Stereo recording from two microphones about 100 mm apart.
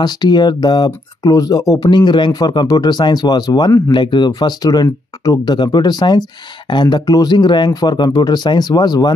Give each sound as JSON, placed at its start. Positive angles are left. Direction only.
{"t": 0.0, "sound": "speech", "side_deg": 45}